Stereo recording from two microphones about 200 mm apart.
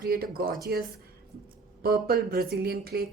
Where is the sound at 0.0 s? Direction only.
50° right (ahead or behind).